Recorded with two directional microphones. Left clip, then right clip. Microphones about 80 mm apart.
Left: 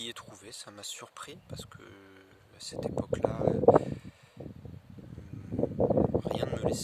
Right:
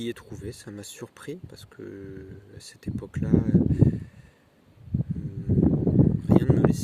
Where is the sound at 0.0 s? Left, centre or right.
Left.